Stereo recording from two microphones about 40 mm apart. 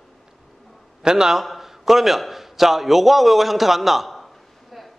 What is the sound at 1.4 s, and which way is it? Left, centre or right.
A man's voice, centre.